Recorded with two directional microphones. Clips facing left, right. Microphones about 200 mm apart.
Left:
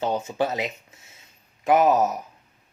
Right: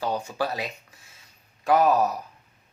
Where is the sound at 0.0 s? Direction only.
20° left (ahead or behind).